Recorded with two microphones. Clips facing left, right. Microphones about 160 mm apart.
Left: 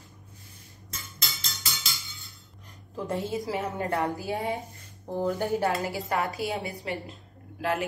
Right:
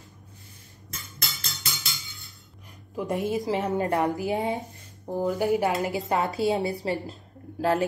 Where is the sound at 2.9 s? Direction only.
15° right (ahead or behind).